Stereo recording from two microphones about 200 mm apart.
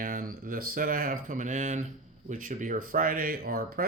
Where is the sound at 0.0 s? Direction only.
45° right (ahead or behind).